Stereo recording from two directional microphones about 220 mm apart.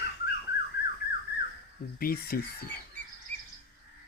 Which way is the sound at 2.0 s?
40° left (ahead or behind).